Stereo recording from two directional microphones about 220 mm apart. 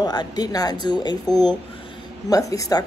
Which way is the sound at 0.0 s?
20° left (ahead or behind).